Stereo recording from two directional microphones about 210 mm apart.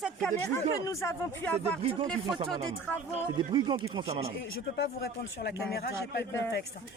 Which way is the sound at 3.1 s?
20° right (ahead or behind).